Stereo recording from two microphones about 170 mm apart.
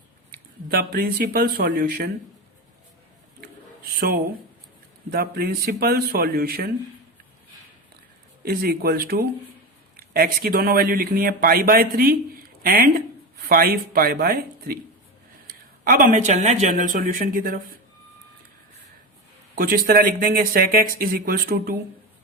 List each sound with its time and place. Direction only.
0.7 s speech: 65° right (ahead or behind)
3.9 s speech: 65° right (ahead or behind)
8.4 s speech: 60° right (ahead or behind)
19.5 s speech: 60° right (ahead or behind)